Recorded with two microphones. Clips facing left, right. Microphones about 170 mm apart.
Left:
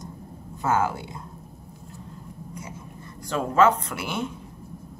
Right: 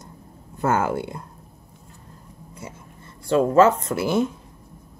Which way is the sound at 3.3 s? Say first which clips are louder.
Right 4 dB; 35° right (ahead or behind).